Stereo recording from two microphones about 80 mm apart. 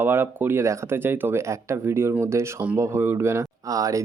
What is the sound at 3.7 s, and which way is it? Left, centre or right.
Speech, right.